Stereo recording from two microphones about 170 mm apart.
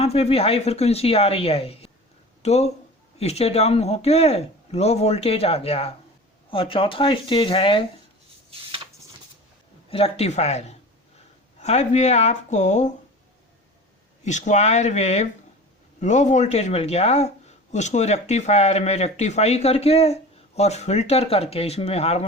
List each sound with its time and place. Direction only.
0.0 s speech: 35° left (ahead or behind)
9.9 s speech: 35° left (ahead or behind)
14.3 s speech: 45° left (ahead or behind)